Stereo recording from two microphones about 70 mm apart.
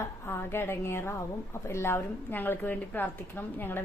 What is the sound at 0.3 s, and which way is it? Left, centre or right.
A woman's voice, left.